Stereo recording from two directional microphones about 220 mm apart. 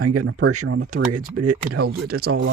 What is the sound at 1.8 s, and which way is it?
Speech, 45° right (ahead or behind).